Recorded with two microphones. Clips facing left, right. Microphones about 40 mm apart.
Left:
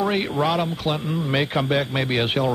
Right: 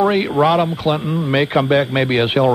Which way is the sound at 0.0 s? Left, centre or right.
Centre.